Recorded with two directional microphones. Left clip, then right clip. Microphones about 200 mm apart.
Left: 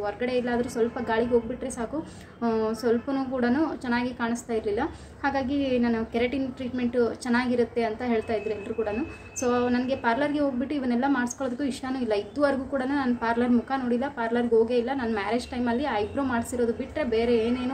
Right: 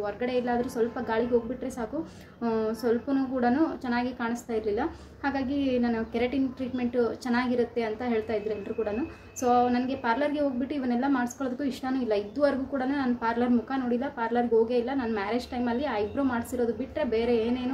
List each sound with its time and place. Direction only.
0.0 s a woman's voice: 5° left (ahead or behind)
2.4 s a woman's voice: 5° left (ahead or behind)